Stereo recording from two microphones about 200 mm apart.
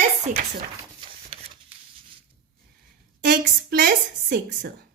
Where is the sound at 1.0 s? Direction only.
25° right (ahead or behind).